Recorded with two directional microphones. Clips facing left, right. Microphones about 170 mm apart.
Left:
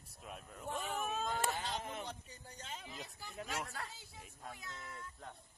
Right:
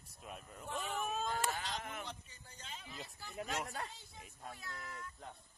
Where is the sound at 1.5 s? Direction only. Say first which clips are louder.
Left 2 dB; 25° left (ahead or behind); by 2.8 s 45° left (ahead or behind).